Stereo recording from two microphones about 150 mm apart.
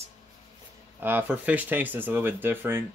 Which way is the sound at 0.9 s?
15° right (ahead or behind).